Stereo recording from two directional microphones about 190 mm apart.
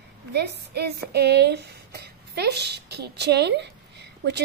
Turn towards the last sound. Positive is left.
turn(degrees=-60)  # may be behind; listen again after turning